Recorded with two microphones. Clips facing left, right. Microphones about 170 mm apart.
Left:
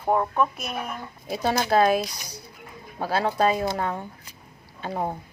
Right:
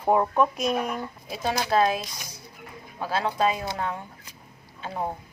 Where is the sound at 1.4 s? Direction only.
45° left (ahead or behind).